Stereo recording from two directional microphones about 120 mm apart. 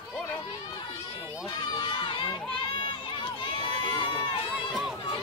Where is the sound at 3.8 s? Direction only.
40° left (ahead or behind).